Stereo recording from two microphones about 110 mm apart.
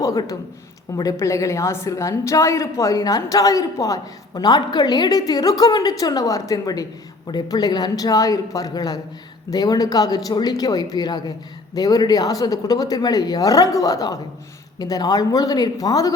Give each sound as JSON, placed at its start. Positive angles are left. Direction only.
{"t": 0.0, "sound": "a woman's voice", "side_deg": 30}